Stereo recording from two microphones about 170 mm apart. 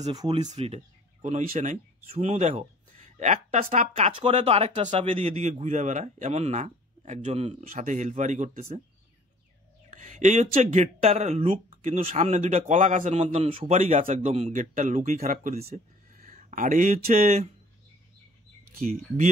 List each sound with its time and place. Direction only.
0.0 s speech: 25° right (ahead or behind)
0.5 s speech: 40° right (ahead or behind)
9.8 s speech: 45° right (ahead or behind)
15.6 s a sound: 50° right (ahead or behind)